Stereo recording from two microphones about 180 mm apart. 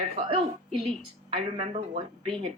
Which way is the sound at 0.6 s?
Centre (ahead or behind).